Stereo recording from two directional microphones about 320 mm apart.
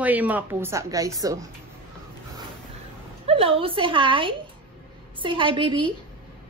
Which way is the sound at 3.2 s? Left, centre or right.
Centre.